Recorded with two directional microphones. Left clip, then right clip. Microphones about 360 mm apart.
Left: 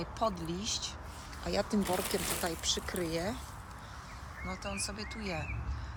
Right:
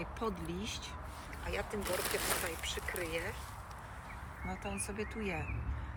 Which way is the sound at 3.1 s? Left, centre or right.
Left.